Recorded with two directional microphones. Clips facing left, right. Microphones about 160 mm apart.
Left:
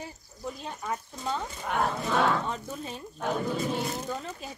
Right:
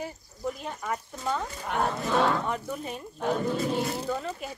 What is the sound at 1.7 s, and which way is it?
Speech, centre (ahead or behind).